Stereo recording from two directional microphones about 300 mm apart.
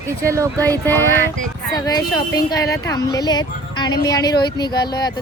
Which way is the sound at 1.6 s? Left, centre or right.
Centre.